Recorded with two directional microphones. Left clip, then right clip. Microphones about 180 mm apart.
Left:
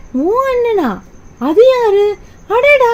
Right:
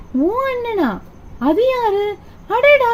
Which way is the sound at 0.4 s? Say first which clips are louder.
Left 6 dB; 65° left (ahead or behind).